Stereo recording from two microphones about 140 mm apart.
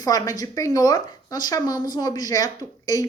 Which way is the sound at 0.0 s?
25° left (ahead or behind).